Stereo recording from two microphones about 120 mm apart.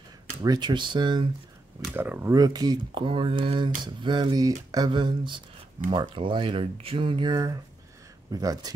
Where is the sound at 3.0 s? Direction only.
45° right (ahead or behind).